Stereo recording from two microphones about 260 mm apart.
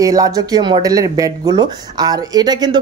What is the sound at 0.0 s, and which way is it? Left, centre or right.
Speech, centre.